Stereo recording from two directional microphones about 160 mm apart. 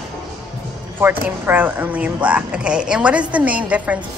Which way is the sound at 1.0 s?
15° right (ahead or behind).